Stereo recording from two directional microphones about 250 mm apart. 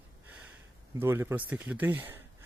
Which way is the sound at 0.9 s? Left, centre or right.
Centre.